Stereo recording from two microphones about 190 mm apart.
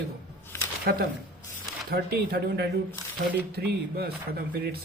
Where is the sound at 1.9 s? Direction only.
55° right (ahead or behind).